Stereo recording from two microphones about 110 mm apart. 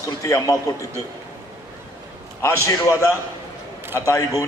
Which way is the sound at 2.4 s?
25° left (ahead or behind).